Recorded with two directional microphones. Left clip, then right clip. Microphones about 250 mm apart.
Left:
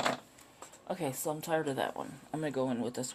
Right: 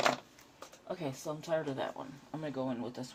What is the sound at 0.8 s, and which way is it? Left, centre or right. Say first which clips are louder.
Speech: left 4 dB; left.